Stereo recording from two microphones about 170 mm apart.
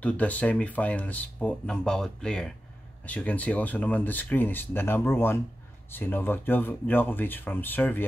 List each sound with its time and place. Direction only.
0.0 s speech: 10° left (ahead or behind)